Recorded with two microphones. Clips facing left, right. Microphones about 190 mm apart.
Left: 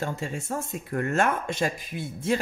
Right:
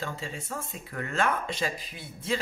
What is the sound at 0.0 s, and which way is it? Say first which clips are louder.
Speech: left 5 dB; 45° left (ahead or behind).